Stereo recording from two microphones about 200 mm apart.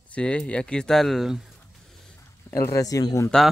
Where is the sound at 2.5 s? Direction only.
15° left (ahead or behind).